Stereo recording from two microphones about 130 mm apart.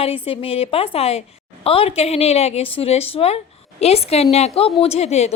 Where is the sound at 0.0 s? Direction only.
45° left (ahead or behind).